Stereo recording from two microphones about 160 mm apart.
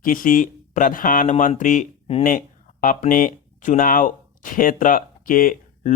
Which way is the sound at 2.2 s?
55° left (ahead or behind).